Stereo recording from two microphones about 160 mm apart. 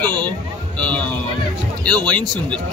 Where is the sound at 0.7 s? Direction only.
5° left (ahead or behind).